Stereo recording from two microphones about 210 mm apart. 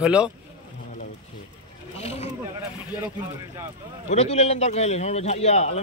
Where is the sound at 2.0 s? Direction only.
30° left (ahead or behind).